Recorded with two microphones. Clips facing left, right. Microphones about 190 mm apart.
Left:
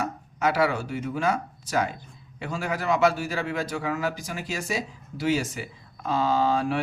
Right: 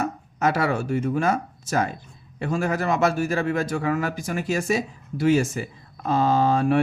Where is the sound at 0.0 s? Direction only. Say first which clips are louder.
Right 3 dB; 45° right (ahead or behind).